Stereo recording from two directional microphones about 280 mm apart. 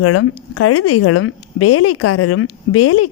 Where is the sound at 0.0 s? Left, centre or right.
Left.